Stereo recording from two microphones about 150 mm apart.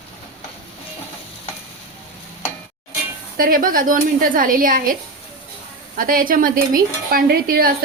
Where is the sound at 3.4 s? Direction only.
70° right (ahead or behind).